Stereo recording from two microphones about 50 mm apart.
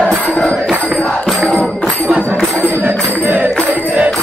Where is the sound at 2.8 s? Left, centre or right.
Right.